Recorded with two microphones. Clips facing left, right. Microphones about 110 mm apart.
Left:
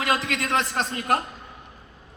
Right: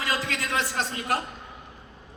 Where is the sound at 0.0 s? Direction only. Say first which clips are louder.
Left 4 dB; 65° left (ahead or behind).